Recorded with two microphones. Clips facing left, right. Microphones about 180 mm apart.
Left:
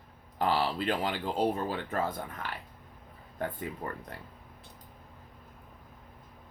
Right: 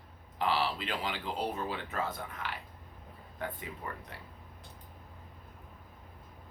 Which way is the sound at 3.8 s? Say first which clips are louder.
Left 3 dB; 50° left (ahead or behind).